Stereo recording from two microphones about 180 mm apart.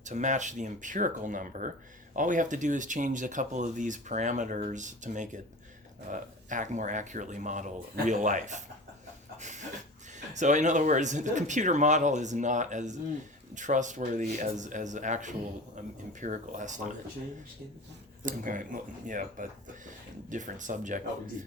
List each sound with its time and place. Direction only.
0.0 s speech: 40° right (ahead or behind)
9.4 s a sound: 40° right (ahead or behind)
10.3 s speech: 40° right (ahead or behind)
18.2 s speech: 45° right (ahead or behind)